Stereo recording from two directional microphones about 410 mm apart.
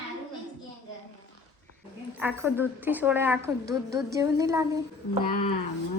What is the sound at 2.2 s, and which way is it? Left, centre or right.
A woman's voice, centre.